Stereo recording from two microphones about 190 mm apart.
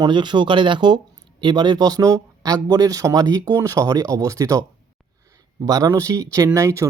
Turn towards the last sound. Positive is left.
turn(degrees=-15)  # may be behind; listen again after turning